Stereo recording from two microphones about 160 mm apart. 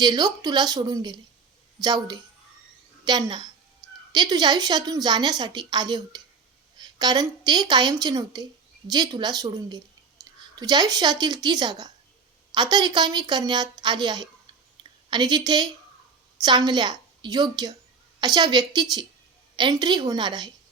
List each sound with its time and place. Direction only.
0.0 s a woman's voice: 25° right (ahead or behind)